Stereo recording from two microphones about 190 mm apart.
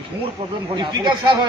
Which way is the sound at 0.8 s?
25° right (ahead or behind).